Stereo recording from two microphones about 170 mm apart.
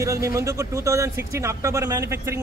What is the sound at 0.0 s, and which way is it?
Speech, 20° right (ahead or behind).